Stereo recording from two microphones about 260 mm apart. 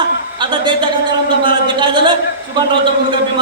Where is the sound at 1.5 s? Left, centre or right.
Centre.